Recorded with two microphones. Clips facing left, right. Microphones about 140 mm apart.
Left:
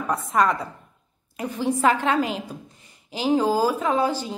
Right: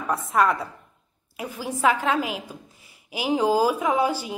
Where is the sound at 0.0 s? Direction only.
5° right (ahead or behind).